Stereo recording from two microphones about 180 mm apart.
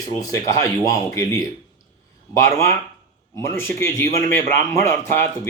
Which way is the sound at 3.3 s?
15° left (ahead or behind).